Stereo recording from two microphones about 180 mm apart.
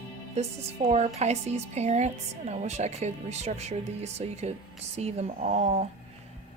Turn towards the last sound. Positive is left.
turn(degrees=-40)  # may be behind; listen again after turning